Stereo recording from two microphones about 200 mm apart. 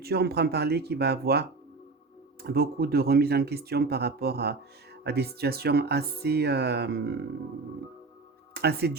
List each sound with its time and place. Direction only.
0.0 s speech: 55° right (ahead or behind)
8.5 s speech: 55° right (ahead or behind)